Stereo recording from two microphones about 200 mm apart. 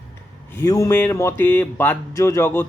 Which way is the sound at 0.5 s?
15° left (ahead or behind).